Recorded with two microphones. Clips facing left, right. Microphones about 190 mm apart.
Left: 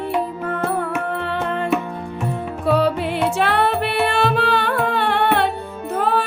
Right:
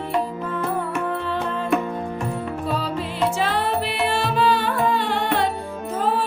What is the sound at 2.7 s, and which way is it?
Music, 65° left (ahead or behind).